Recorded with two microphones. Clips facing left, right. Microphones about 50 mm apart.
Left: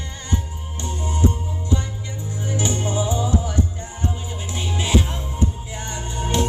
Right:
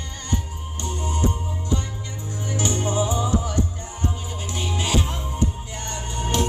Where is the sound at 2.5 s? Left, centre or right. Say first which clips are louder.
Left 1 dB; left.